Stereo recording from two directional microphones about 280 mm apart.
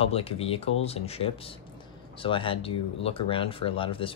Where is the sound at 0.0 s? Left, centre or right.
Left.